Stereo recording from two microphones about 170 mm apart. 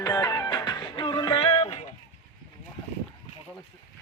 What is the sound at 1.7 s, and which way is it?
Run, 45° left (ahead or behind).